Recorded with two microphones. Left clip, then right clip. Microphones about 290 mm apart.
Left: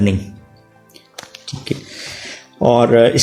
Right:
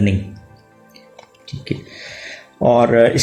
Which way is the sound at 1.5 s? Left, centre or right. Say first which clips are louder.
Left 2 dB; left.